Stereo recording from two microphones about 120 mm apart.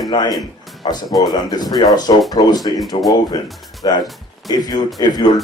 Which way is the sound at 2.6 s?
Centre (ahead or behind).